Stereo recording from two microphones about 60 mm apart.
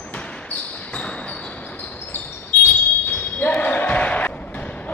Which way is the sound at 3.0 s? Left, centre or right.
Left.